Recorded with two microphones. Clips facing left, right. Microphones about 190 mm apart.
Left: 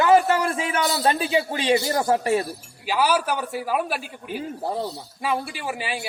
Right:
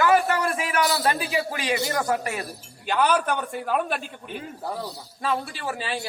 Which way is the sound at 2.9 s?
5° left (ahead or behind).